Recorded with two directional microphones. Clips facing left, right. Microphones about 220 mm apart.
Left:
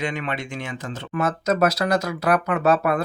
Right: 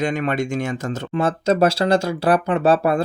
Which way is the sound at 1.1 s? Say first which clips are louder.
Right 3 dB; 30° right (ahead or behind).